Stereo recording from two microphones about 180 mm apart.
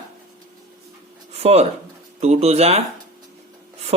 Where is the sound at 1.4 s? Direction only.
35° right (ahead or behind).